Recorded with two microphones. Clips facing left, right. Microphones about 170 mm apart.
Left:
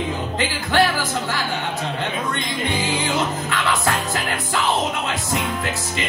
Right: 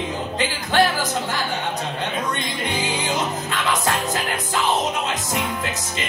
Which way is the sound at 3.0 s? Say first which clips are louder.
Left 2 dB; 20° right (ahead or behind).